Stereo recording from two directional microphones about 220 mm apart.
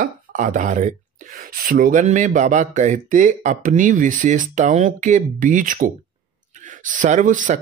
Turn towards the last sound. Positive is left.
turn(degrees=-35)  # may be behind; listen again after turning